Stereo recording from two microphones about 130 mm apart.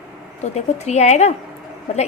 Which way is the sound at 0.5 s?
60° left (ahead or behind).